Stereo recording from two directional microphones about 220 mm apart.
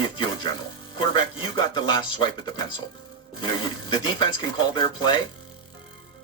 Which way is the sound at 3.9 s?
20° left (ahead or behind).